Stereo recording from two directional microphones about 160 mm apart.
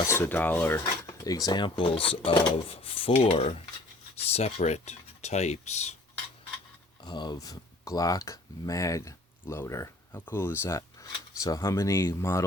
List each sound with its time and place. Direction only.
0.1 s speech: 15° left (ahead or behind); by 5.9 s 45° left (ahead or behind)
7.0 s speech: 25° left (ahead or behind)